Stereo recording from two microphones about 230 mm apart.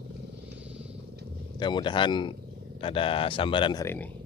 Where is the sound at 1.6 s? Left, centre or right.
Centre.